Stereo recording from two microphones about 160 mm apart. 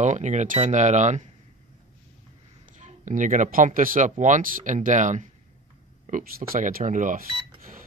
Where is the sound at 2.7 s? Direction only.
50° right (ahead or behind).